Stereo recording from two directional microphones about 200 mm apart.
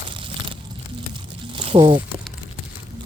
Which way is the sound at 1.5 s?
25° right (ahead or behind).